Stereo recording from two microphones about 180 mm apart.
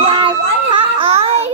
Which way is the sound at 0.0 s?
25° right (ahead or behind).